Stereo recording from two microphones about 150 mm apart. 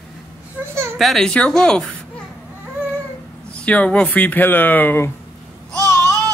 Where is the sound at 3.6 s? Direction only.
10° left (ahead or behind).